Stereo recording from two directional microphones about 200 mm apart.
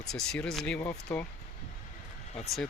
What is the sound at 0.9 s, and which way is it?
Speech, 15° left (ahead or behind).